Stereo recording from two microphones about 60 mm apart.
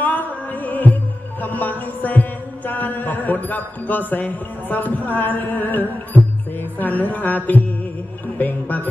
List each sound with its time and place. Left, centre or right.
0.0 s music: left